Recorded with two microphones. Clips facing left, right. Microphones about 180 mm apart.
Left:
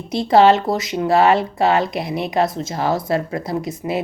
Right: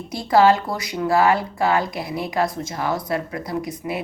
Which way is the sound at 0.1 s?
20° left (ahead or behind).